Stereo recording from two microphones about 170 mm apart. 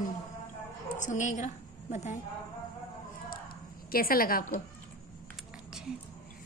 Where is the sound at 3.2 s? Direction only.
60° left (ahead or behind).